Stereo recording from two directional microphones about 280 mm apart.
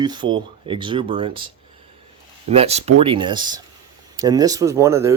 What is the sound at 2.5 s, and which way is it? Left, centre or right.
Speech, right.